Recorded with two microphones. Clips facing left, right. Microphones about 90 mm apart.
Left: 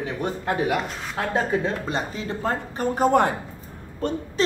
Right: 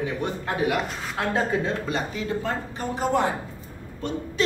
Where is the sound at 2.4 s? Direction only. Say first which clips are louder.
Left 4 dB; 45° left (ahead or behind).